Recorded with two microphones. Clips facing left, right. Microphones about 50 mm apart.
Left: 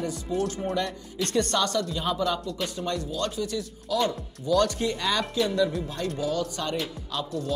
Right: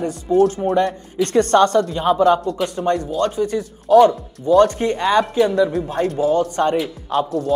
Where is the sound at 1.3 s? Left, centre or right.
Right.